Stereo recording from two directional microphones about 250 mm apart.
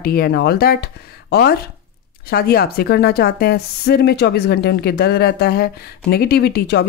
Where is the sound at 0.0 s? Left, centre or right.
Left.